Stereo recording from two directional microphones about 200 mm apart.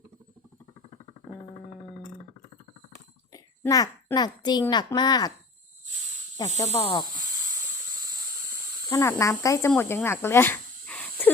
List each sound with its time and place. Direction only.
2.9 s a child's voice: 15° left (ahead or behind)
6.7 s speech: 30° left (ahead or behind)
8.9 s speech: 15° left (ahead or behind)